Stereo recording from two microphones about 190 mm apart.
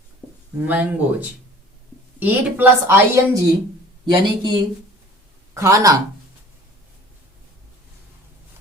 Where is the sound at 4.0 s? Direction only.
25° right (ahead or behind).